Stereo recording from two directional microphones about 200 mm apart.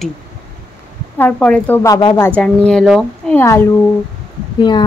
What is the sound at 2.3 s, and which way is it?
Speech, 5° left (ahead or behind).